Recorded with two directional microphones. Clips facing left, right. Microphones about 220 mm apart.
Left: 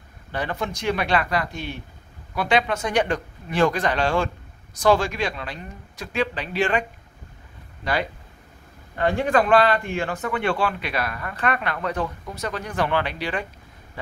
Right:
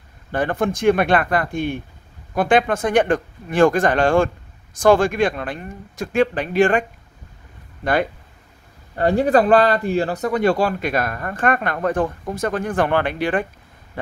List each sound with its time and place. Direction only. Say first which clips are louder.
0.3 s speech: right 7 dB; 50° right (ahead or behind)
8.9 s speech: right 5 dB; 40° right (ahead or behind)